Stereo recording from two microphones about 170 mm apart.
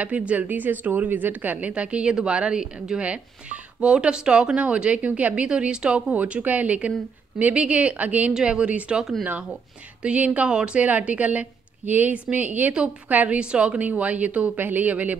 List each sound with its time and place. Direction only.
0.0 s a woman's voice: 10° right (ahead or behind)